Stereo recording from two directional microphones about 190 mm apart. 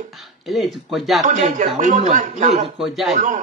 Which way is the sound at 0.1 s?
Centre (ahead or behind).